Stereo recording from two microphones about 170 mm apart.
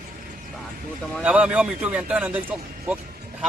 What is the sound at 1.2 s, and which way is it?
Speech, 10° right (ahead or behind).